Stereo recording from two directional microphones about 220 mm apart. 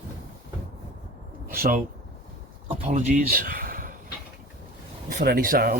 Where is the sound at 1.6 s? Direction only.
40° right (ahead or behind).